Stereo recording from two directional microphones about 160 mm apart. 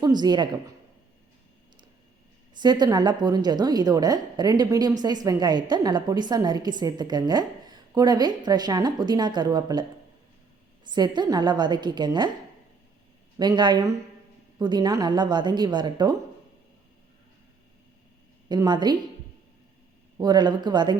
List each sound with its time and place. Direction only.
0.0 s a woman's voice: 25° right (ahead or behind)
2.6 s a woman's voice: 25° right (ahead or behind)
10.9 s a woman's voice: 25° right (ahead or behind)
13.4 s a woman's voice: 25° right (ahead or behind)
18.4 s a woman's voice: 25° right (ahead or behind)
20.1 s a woman's voice: 25° right (ahead or behind)